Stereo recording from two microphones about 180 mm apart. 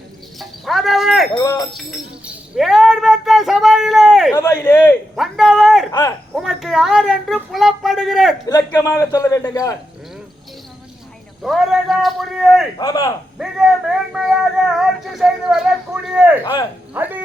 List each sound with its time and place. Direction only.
0.3 s a sound: centre (ahead or behind)
1.4 s speech: 20° left (ahead or behind)
1.7 s speech: 5° right (ahead or behind)
4.4 s a man's voice: 20° left (ahead or behind)
5.1 s speech: centre (ahead or behind)
5.9 s a man's voice: 20° left (ahead or behind)
6.3 s speech: centre (ahead or behind)
8.4 s a man's voice: 20° left (ahead or behind)
11.4 s speech: centre (ahead or behind)
12.8 s speech: 20° left (ahead or behind)
13.4 s speech: centre (ahead or behind)
16.4 s speech: 25° left (ahead or behind)
16.9 s speech: 10° right (ahead or behind)